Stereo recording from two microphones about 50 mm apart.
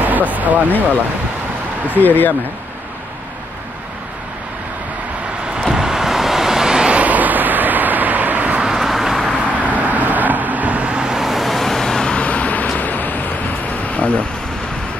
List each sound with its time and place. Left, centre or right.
0.0 s speech: right
1.9 s speech: left
5.5 s vehicle: centre
6.9 s vehicle: right
8.5 s vehicle: centre
9.4 s vehicle: right
11.1 s vehicle: centre
12.2 s vehicle: left
12.7 s a sound: left